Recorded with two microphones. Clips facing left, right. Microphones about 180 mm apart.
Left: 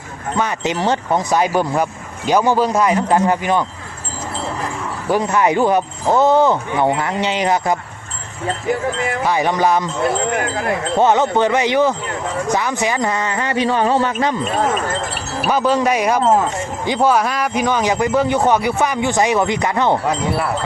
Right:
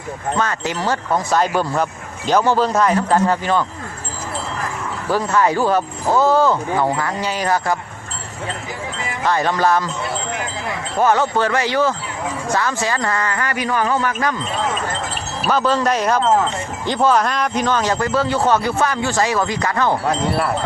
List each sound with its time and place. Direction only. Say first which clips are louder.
0.3 s speech: left 4 dB; 20° left (ahead or behind)
5.0 s speech: left 1 dB; 20° left (ahead or behind)
9.2 s speech: even; 15° left (ahead or behind)
10.3 s wind chime: left 6 dB; 50° left (ahead or behind)
10.9 s speech: left 2 dB; 20° left (ahead or behind)
15.4 s speech: left 1 dB; 15° left (ahead or behind)
20.1 s chime: even; centre (ahead or behind)